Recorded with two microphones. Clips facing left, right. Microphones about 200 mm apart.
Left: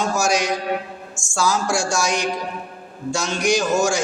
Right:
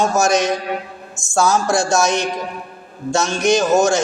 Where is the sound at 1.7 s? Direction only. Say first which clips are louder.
Right 5 dB; 20° right (ahead or behind).